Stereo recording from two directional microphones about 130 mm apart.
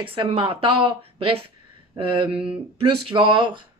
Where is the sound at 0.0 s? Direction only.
45° right (ahead or behind).